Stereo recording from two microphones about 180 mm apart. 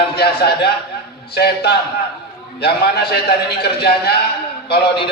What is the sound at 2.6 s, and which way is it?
A man's voice, 65° left (ahead or behind).